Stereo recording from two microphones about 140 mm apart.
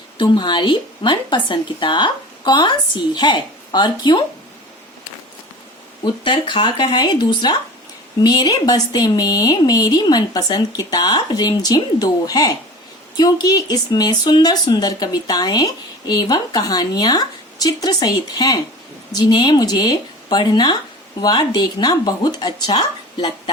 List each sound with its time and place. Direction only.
0.2 s a woman's voice: 35° left (ahead or behind)
6.2 s a woman's voice: 35° left (ahead or behind)